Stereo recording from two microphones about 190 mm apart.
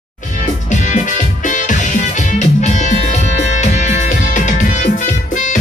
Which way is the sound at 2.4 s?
40° left (ahead or behind).